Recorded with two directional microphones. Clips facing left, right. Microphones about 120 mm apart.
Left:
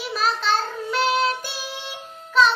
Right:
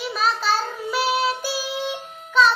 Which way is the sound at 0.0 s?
Centre (ahead or behind).